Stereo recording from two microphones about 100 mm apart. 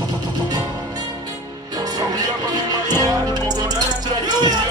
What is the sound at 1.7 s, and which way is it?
Music, 40° right (ahead or behind).